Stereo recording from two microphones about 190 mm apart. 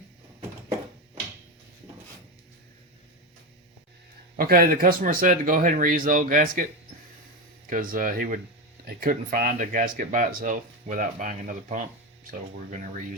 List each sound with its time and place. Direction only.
4.4 s speech: 50° right (ahead or behind)
7.7 s speech: 45° right (ahead or behind)